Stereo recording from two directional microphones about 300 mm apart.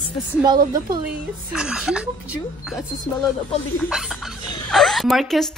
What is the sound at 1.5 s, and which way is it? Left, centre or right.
Speech, centre.